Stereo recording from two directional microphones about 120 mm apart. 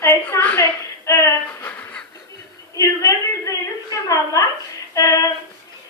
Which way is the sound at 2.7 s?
30° left (ahead or behind).